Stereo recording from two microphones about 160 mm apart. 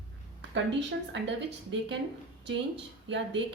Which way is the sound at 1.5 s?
90° right.